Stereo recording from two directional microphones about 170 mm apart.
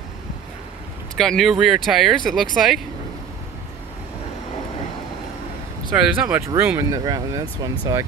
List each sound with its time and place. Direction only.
1.1 s speech: 5° left (ahead or behind)
5.9 s speech: 10° right (ahead or behind)